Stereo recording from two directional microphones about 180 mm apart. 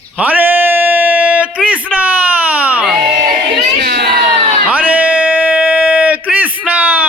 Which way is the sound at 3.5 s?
70° right (ahead or behind).